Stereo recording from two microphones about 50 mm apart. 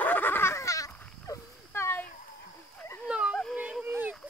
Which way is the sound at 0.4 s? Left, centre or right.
Left.